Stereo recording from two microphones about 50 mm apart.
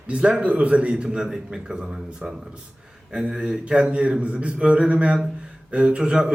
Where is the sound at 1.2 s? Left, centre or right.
Centre.